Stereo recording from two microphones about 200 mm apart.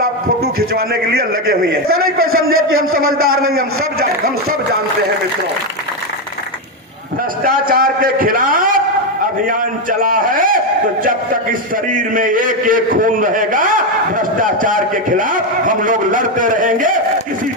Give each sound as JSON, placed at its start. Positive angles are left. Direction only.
{"t": 0.7, "sound": "a man's voice", "side_deg": -50}
{"t": 2.2, "sound": "a man's voice", "side_deg": -90}
{"t": 7.4, "sound": "a man's voice", "side_deg": -45}
{"t": 10.0, "sound": "a man's voice", "side_deg": -45}
{"t": 11.9, "sound": "a man's voice", "side_deg": -40}